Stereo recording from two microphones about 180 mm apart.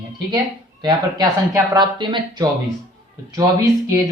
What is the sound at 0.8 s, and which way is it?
Speech, 20° right (ahead or behind).